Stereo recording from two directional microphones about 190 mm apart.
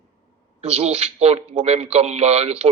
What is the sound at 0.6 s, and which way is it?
A man's voice, 35° right (ahead or behind).